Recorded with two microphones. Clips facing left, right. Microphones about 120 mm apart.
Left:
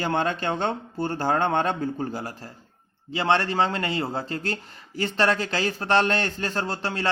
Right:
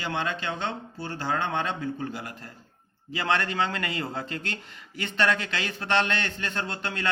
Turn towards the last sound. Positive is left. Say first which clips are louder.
# left 4 dB
turn(degrees=30)  # may be behind; listen again after turning